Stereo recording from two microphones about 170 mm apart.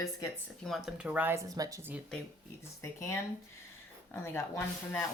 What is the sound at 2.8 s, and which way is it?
A woman's voice, 15° left (ahead or behind).